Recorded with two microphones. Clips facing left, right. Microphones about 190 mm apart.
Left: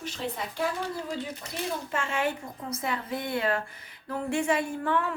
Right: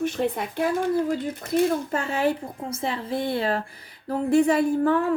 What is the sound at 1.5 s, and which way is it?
A woman's voice, 40° right (ahead or behind).